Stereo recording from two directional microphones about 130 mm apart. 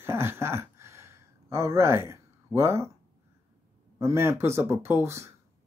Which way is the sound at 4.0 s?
20° right (ahead or behind).